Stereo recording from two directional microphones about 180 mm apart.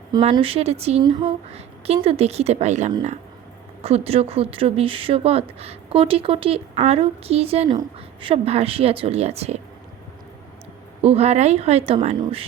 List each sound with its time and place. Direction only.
0.1 s a woman's voice: 30° right (ahead or behind)
11.0 s a woman's voice: 35° right (ahead or behind)